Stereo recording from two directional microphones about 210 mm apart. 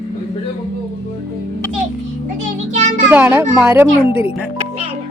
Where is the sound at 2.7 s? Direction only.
35° right (ahead or behind).